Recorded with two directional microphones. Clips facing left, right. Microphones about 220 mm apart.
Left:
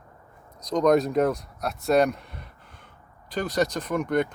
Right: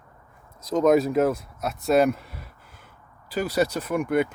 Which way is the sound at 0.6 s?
5° right (ahead or behind).